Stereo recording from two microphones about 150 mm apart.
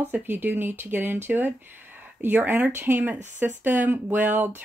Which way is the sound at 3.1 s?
50° right (ahead or behind).